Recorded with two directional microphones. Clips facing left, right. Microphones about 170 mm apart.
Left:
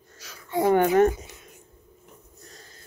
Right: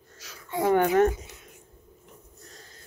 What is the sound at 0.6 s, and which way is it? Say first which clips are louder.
Speech: left 2 dB; 15° left (ahead or behind).